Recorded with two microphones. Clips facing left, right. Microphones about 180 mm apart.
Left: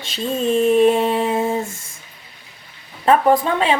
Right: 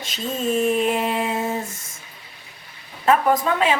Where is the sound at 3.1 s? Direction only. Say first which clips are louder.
Left 3 dB; 30° left (ahead or behind).